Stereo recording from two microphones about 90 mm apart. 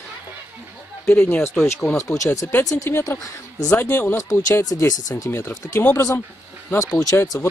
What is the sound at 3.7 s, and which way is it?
Speech, 25° left (ahead or behind).